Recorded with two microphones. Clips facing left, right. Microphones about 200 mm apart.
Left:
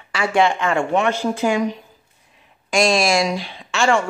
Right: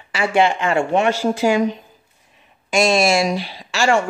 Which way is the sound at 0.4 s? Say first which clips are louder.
Right 1 dB; 30° right (ahead or behind).